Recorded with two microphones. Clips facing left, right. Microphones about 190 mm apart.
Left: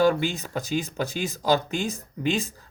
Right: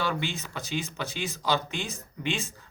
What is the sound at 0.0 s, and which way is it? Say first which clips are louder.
Speech: left 9 dB; 45° left (ahead or behind).